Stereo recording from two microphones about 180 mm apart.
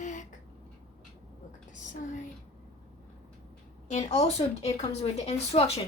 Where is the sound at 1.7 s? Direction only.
45° left (ahead or behind).